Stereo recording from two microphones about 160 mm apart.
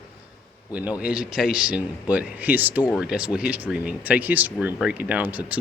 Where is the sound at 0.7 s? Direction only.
10° right (ahead or behind).